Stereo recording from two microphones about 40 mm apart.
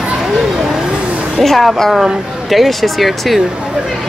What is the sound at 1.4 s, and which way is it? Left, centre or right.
A woman's voice, centre.